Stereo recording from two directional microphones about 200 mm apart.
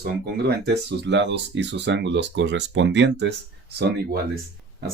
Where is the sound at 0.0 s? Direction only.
55° right (ahead or behind).